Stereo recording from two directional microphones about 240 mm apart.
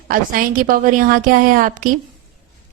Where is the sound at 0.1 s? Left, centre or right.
Right.